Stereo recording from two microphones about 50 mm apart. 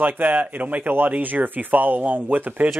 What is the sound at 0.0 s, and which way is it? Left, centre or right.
Speech, right.